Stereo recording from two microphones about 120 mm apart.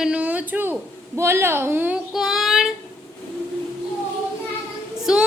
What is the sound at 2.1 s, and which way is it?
Child singing, centre (ahead or behind).